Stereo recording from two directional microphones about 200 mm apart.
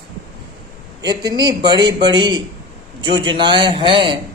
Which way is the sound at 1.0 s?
20° right (ahead or behind).